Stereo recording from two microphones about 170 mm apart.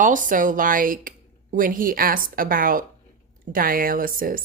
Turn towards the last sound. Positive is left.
turn(degrees=-55)  # may be behind; listen again after turning